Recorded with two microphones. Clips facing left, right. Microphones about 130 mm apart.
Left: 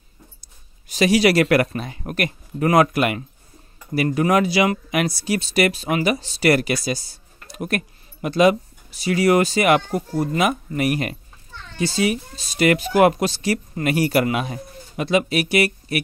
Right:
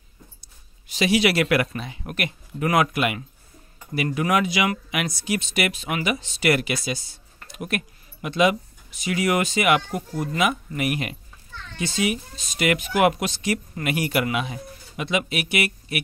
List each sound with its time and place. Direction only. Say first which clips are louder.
0.8 s speech: left 4 dB; 45° left (ahead or behind)